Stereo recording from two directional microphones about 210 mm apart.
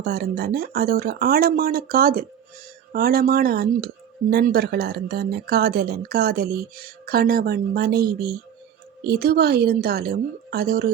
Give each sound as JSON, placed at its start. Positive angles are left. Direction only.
{"t": 0.0, "sound": "speech", "side_deg": -50}